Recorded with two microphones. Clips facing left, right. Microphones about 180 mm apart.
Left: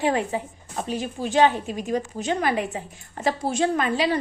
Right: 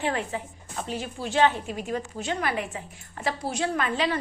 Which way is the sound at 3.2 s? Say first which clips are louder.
Left 5 dB; 45° left (ahead or behind).